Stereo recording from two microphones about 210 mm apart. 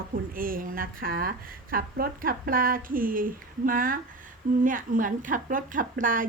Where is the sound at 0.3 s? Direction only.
40° right (ahead or behind).